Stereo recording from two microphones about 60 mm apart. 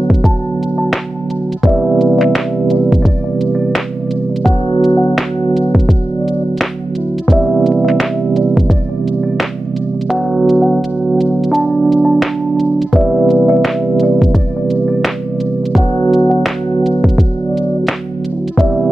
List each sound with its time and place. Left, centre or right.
1.6 s music: centre
4.4 s music: centre
7.2 s music: centre
10.1 s music: centre